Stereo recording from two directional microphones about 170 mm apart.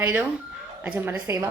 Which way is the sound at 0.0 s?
10° right (ahead or behind).